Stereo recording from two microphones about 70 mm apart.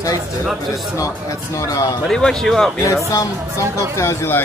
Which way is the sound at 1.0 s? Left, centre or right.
Left.